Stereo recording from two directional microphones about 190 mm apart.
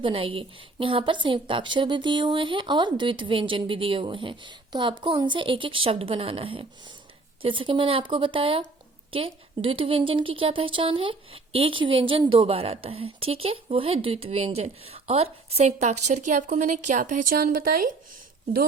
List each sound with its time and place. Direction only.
0.0 s a woman's voice: 30° right (ahead or behind); by 17.9 s 45° right (ahead or behind)